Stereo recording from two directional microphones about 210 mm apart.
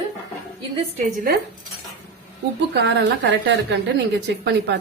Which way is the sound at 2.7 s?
60° right (ahead or behind).